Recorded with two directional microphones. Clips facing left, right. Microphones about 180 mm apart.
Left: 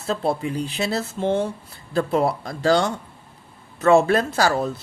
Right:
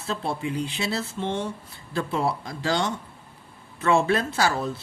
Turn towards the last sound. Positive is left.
turn(degrees=40)  # may be behind; listen again after turning